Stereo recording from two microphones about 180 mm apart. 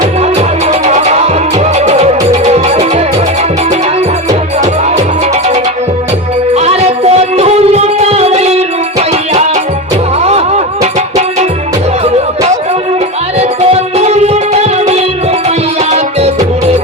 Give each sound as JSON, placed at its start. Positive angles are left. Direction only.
{"t": 0.0, "sound": "music", "side_deg": -35}
{"t": 4.3, "sound": "music", "side_deg": -40}
{"t": 10.2, "sound": "a sound", "side_deg": -35}
{"t": 13.4, "sound": "music", "side_deg": -35}